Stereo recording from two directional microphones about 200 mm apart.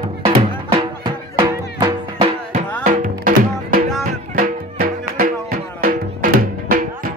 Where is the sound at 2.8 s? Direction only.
45° right (ahead or behind).